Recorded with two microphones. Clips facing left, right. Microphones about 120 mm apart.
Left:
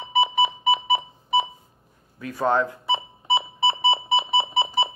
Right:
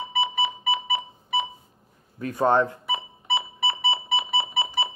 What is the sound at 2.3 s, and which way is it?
Speech, 20° right (ahead or behind).